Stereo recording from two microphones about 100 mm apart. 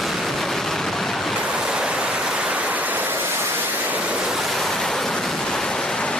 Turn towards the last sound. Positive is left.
turn(degrees=5)  # may be behind; listen again after turning